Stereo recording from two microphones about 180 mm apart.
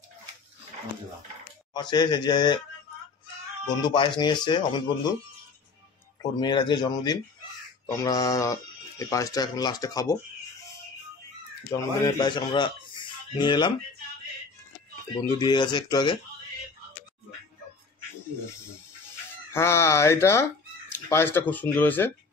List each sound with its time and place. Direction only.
1.7 s speech: 25° left (ahead or behind)
3.9 s speech: 25° left (ahead or behind)
6.4 s speech: 25° left (ahead or behind)
11.7 s speech: 25° left (ahead or behind)
15.2 s speech: 25° left (ahead or behind)
19.5 s speech: 15° left (ahead or behind)